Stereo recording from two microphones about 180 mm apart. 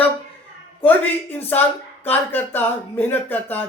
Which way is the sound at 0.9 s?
10° left (ahead or behind).